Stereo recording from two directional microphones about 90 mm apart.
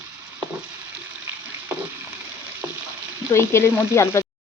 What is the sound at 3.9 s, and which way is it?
Speech, 30° left (ahead or behind).